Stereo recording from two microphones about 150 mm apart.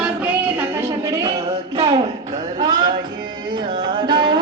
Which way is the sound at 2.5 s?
30° right (ahead or behind).